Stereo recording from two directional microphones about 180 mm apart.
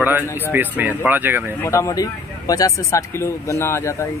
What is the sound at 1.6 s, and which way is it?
Speech, 15° left (ahead or behind).